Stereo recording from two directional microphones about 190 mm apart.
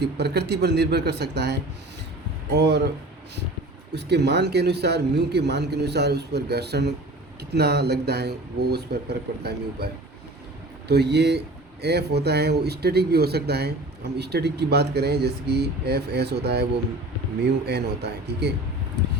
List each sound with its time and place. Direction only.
0.0 s a man's voice: 60° right (ahead or behind)
2.6 s a man's voice: 60° right (ahead or behind)
3.9 s a man's voice: 60° right (ahead or behind)